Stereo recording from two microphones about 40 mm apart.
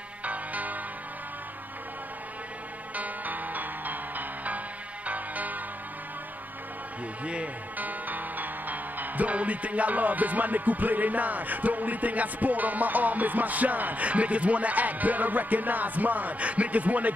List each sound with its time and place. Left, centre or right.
0.2 s music: right
3.0 s music: right
7.7 s music: right